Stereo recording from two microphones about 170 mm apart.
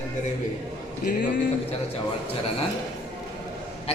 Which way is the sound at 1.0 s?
55° left (ahead or behind).